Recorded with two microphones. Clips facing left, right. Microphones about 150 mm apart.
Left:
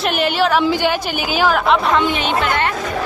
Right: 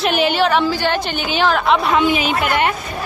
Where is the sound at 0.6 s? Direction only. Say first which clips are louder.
Left 1 dB; 15° left (ahead or behind); by 2.7 s 15° right (ahead or behind).